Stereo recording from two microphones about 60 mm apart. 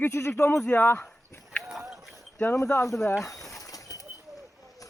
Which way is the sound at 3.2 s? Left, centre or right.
Left.